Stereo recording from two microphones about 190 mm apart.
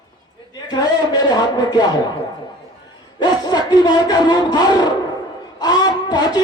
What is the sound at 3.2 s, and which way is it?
Speech, 20° left (ahead or behind).